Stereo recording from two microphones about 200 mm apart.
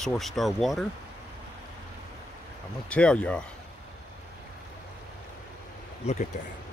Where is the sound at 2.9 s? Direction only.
5° left (ahead or behind).